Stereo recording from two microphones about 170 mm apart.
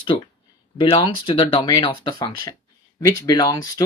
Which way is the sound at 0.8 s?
25° left (ahead or behind).